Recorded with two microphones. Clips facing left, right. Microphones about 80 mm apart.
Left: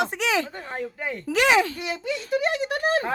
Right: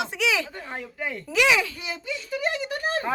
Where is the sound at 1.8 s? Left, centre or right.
Left.